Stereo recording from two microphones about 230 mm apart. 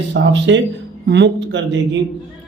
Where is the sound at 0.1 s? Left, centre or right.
Right.